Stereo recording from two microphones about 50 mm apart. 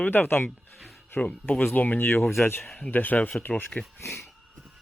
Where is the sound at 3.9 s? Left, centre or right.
Left.